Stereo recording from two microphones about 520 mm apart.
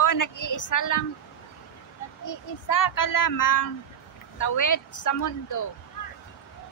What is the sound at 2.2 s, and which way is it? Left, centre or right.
A child's voice, left.